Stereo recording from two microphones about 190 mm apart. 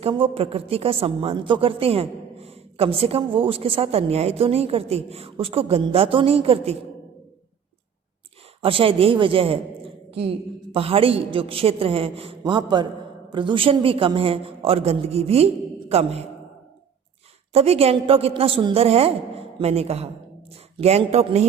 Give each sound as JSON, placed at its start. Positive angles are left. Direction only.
{"t": 0.0, "sound": "a woman's voice", "side_deg": -30}
{"t": 8.6, "sound": "a man's voice", "side_deg": -30}
{"t": 17.5, "sound": "a woman's voice", "side_deg": -35}